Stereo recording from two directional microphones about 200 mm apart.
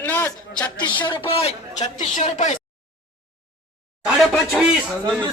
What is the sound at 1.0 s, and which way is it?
A woman's voice, 25° left (ahead or behind).